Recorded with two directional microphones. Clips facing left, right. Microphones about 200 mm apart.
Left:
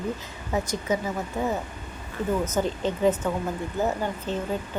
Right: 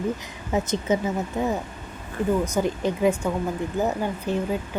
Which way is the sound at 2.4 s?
15° right (ahead or behind).